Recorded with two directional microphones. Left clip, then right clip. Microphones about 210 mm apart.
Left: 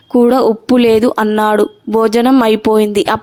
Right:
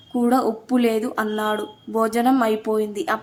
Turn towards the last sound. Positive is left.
turn(degrees=40)  # may be behind; listen again after turning